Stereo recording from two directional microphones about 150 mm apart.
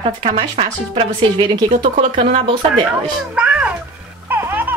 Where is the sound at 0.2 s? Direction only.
40° right (ahead or behind).